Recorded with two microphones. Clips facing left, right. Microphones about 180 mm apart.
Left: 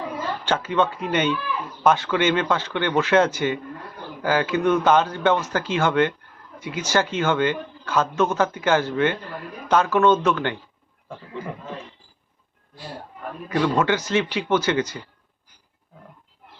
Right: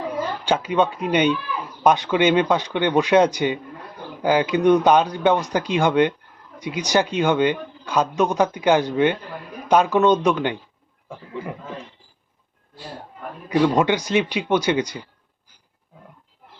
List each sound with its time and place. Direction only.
0.4 s speech: 15° right (ahead or behind)
13.5 s speech: 15° right (ahead or behind)